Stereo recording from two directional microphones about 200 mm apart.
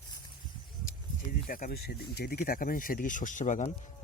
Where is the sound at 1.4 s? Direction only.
45° left (ahead or behind).